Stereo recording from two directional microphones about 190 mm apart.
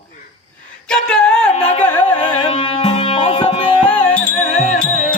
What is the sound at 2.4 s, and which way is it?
Music, 30° left (ahead or behind).